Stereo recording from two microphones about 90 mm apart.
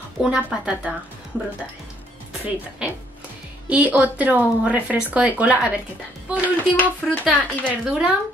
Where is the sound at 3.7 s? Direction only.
15° right (ahead or behind).